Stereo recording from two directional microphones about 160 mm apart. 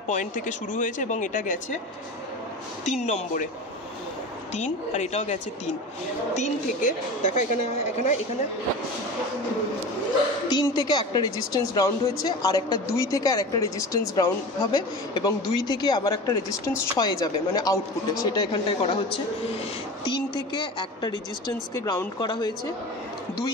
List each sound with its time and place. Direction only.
0.1 s a woman's voice: 50° left (ahead or behind)
2.8 s a woman's voice: 45° left (ahead or behind)
4.6 s a woman's voice: 45° left (ahead or behind)
10.5 s a woman's voice: 25° left (ahead or behind)